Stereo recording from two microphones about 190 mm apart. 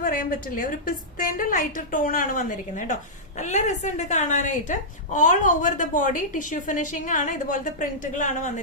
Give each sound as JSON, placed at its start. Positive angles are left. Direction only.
{"t": 0.0, "sound": "a woman's voice", "side_deg": 50}